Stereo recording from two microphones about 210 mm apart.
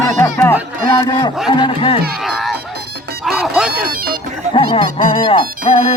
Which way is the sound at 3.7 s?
45° right (ahead or behind).